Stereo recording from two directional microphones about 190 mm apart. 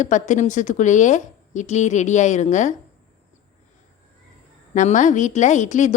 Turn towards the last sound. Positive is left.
turn(degrees=40)  # may be behind; listen again after turning